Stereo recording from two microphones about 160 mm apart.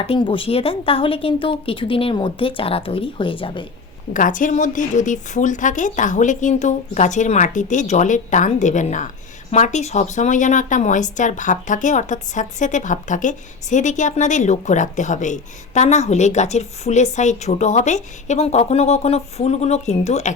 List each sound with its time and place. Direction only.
0.0 s a woman's voice: 35° left (ahead or behind)
4.1 s speech: 55° left (ahead or behind)